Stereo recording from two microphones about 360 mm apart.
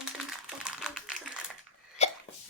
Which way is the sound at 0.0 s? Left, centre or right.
Centre.